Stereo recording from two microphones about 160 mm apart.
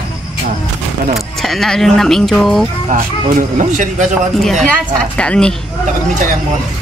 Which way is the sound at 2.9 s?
55° right (ahead or behind).